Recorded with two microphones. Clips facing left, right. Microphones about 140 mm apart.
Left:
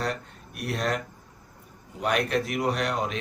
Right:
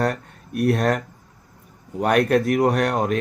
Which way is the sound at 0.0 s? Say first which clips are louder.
Right 7 dB; 50° right (ahead or behind).